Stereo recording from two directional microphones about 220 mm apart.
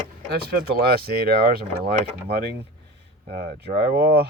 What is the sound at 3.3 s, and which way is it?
Speech, 45° right (ahead or behind).